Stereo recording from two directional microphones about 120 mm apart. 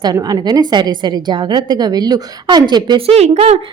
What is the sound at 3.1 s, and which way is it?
Speech, 60° right (ahead or behind).